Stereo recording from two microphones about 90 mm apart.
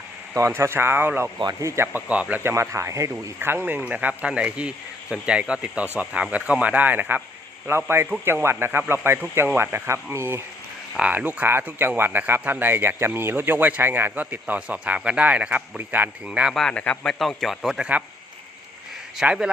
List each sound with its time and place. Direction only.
0.3 s speech: 30° right (ahead or behind)
2.3 s speech: 30° right (ahead or behind)
3.5 s speech: 20° right (ahead or behind)
10.9 s speech: 15° right (ahead or behind)
16.5 s a man's voice: 5° left (ahead or behind)
16.7 s a man's voice: 15° left (ahead or behind)
17.2 s a man's voice: centre (ahead or behind)
19.1 s speech: 10° right (ahead or behind)